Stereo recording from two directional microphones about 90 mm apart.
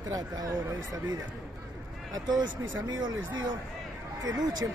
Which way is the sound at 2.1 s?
50° right (ahead or behind).